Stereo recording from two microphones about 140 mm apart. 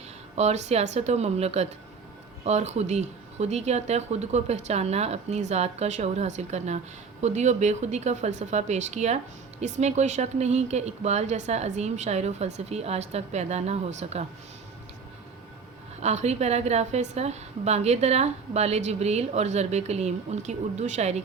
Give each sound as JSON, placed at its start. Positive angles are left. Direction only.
{"t": 0.3, "sound": "speech", "side_deg": -50}
{"t": 16.0, "sound": "speech", "side_deg": -50}